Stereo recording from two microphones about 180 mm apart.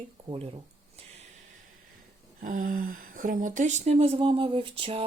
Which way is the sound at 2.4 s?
50° right (ahead or behind).